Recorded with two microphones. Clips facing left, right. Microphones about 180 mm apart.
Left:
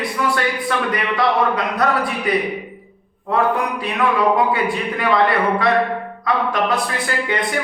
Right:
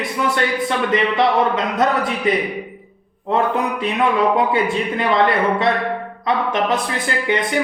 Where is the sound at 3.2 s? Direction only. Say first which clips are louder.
Even; 25° right (ahead or behind).